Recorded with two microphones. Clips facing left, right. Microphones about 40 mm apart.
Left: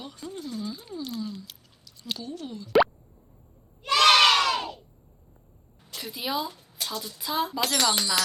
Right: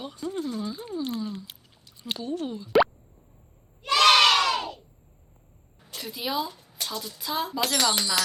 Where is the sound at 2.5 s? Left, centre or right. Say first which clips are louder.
Right 4 dB; right.